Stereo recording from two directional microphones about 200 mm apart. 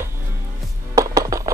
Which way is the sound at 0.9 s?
15° right (ahead or behind).